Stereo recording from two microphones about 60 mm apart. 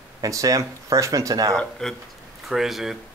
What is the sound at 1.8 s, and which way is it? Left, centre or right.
Speech, centre.